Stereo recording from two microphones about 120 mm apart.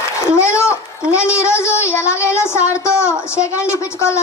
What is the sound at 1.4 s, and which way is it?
Child singing, 20° left (ahead or behind).